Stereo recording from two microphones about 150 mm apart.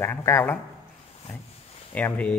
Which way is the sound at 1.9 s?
10° left (ahead or behind).